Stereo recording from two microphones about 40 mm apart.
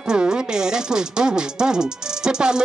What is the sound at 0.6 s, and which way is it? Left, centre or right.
Speech, centre.